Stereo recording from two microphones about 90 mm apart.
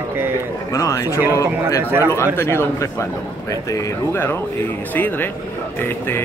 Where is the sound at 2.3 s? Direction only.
25° left (ahead or behind).